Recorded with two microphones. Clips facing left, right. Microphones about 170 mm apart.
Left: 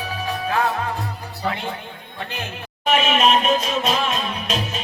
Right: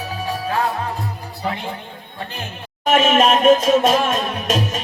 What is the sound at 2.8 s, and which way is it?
Music, 45° right (ahead or behind).